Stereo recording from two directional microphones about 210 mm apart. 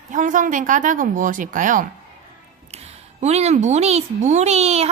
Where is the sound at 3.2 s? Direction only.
30° right (ahead or behind).